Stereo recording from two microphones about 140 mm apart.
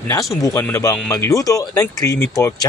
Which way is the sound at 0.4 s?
20° left (ahead or behind).